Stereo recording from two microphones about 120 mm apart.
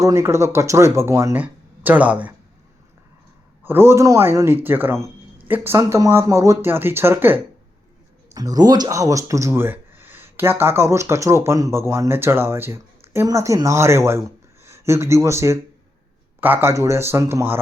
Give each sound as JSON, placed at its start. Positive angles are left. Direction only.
{"t": 0.0, "sound": "speech", "side_deg": -25}
{"t": 3.6, "sound": "speech", "side_deg": -20}
{"t": 8.3, "sound": "speech", "side_deg": -30}